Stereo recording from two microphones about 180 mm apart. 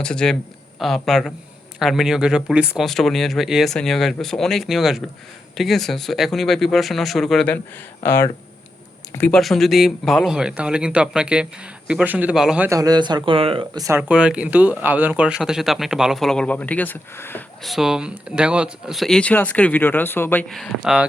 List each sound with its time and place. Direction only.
0.0 s speech: 5° left (ahead or behind); by 13.8 s 30° right (ahead or behind)
13.8 s speech: 10° right (ahead or behind); by 17.4 s 10° left (ahead or behind)
17.6 s speech: centre (ahead or behind)